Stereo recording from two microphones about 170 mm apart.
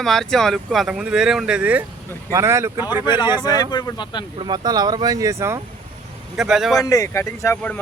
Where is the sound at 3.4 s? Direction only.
25° left (ahead or behind).